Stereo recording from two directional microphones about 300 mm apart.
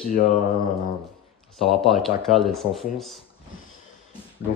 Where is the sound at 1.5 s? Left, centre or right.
Centre.